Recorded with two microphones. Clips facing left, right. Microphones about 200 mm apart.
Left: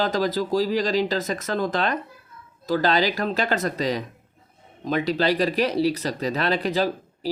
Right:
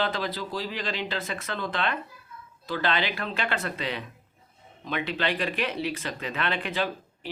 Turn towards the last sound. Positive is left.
turn(degrees=40)  # may be behind; listen again after turning